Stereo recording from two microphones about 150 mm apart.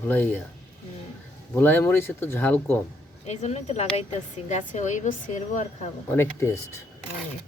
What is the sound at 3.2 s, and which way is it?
Speech, 45° left (ahead or behind).